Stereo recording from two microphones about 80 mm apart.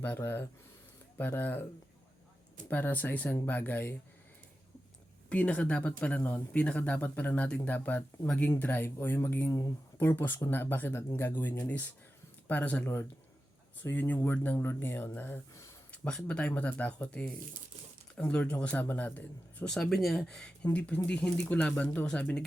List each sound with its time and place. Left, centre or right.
0.0 s speech: left
2.6 s speech: left
5.3 s speech: centre
9.5 s speech: left
10.0 s speech: left
15.9 s speech: centre
19.6 s speech: centre